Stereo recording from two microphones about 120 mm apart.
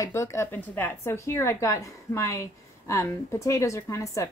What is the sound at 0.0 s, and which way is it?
Speech, 25° left (ahead or behind).